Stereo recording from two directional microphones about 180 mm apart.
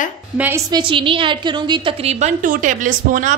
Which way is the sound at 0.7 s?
25° right (ahead or behind).